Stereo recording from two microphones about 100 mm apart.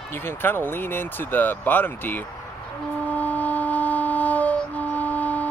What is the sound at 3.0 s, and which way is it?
Wind instrument, 15° left (ahead or behind).